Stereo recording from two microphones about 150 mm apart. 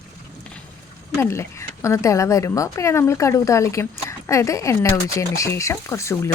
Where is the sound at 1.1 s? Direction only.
20° left (ahead or behind).